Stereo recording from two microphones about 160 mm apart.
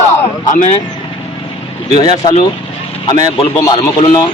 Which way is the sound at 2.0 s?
25° left (ahead or behind).